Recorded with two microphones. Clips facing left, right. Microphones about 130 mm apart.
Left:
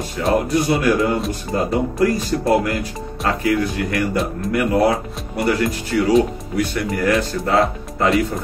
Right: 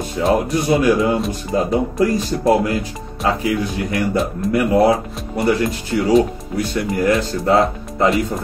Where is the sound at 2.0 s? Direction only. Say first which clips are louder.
Left 1 dB; 25° right (ahead or behind).